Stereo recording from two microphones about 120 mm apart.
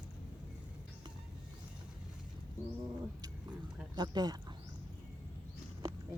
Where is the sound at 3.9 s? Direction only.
35° right (ahead or behind).